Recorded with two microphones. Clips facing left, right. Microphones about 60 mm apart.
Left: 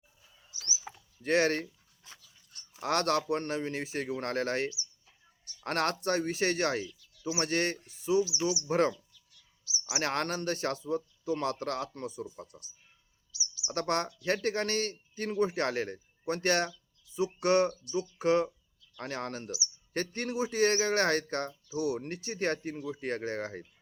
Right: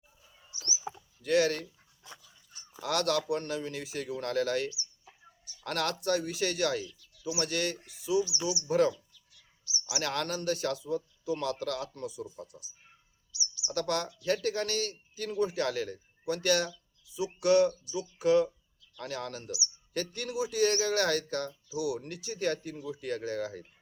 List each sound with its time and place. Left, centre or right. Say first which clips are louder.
0.3 s bird: right 1 dB; centre
1.2 s speech: even; left
2.5 s a sound: right 1 dB; right
2.8 s speech: left 1 dB; left
7.0 s bird: right 1 dB; centre
7.3 s speech: left 2 dB; left
8.9 s a sound: right 2 dB; centre
9.9 s speech: left 1 dB; left
13.7 s speech: left 1 dB; left